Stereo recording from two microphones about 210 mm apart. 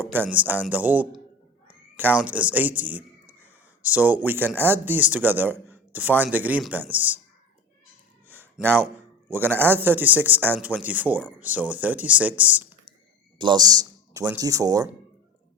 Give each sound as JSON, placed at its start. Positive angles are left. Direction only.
{"t": 0.0, "sound": "speech", "side_deg": -10}
{"t": 8.3, "sound": "a sound", "side_deg": -10}
{"t": 9.3, "sound": "speech", "side_deg": -10}
{"t": 13.4, "sound": "speech", "side_deg": -20}